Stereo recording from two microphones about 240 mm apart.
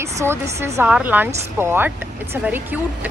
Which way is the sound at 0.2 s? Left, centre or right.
Centre.